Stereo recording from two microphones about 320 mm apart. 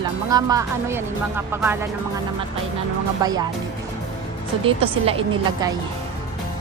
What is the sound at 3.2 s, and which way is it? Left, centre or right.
Speech, centre.